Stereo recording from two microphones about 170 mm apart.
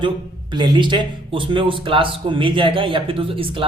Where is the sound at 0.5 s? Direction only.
25° right (ahead or behind).